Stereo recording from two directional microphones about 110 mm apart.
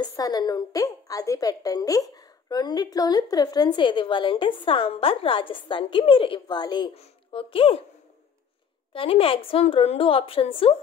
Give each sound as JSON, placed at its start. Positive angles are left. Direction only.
{"t": 0.0, "sound": "a woman's voice", "side_deg": 35}
{"t": 6.4, "sound": "a woman's voice", "side_deg": 40}
{"t": 7.0, "sound": "speech", "side_deg": 55}
{"t": 8.9, "sound": "a woman's voice", "side_deg": 55}